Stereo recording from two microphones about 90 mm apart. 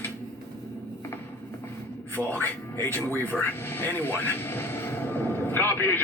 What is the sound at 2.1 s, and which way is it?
Music, 20° left (ahead or behind).